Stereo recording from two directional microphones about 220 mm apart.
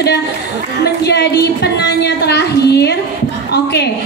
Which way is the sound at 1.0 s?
50° left (ahead or behind).